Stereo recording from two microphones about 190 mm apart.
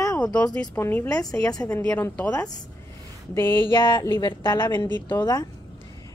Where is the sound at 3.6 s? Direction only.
25° left (ahead or behind).